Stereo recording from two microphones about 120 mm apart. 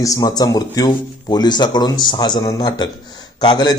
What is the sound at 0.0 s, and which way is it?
Speech, 30° left (ahead or behind).